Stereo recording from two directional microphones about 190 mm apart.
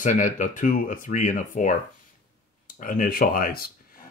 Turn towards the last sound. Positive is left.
turn(degrees=50)  # may be behind; listen again after turning